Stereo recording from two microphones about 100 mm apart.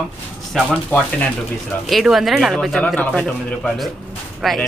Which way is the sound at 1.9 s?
5° right (ahead or behind).